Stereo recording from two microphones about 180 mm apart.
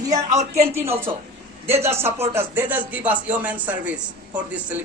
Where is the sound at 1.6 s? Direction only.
15° right (ahead or behind).